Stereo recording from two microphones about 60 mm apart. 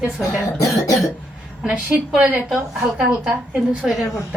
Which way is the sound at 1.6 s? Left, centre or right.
Right.